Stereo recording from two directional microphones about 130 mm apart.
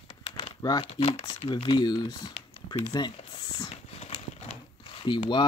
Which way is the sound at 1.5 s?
35° left (ahead or behind).